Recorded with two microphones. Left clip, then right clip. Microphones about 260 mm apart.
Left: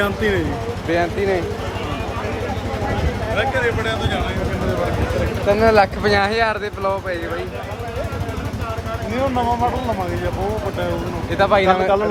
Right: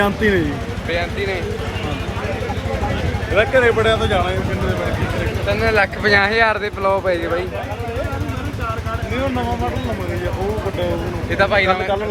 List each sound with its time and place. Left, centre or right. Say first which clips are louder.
0.9 s speech: left 3 dB; left
3.3 s speech: right 6 dB; centre
5.5 s speech: left 3 dB; left
11.3 s speech: left 1 dB; centre